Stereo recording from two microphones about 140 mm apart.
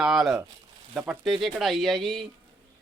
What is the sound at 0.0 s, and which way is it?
Speech, 5° right (ahead or behind).